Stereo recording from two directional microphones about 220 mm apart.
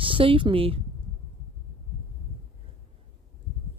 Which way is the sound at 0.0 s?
25° right (ahead or behind).